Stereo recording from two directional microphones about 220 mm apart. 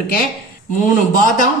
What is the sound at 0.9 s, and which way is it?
Speech, 35° left (ahead or behind).